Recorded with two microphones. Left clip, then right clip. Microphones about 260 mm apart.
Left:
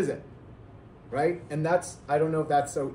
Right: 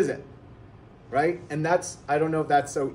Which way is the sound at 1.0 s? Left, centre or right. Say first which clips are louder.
Right 3 dB; right.